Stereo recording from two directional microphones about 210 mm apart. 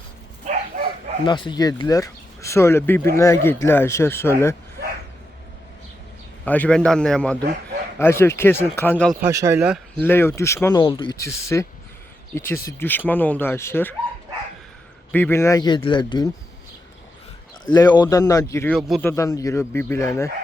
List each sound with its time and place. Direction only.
1.2 s speech: 20° left (ahead or behind)
6.4 s a man's voice: 5° left (ahead or behind)
9.3 s speech: 15° right (ahead or behind)
10.0 s speech: 10° left (ahead or behind)
15.1 s speech: 10° left (ahead or behind)
17.7 s speech: 20° left (ahead or behind)
18.8 s a man's voice: centre (ahead or behind)
19.0 s speech: 15° left (ahead or behind)